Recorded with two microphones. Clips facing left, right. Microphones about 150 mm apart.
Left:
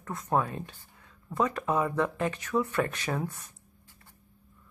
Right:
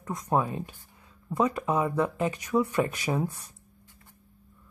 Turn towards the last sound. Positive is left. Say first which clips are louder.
# right 3 dB
turn(degrees=-10)  # may be behind; listen again after turning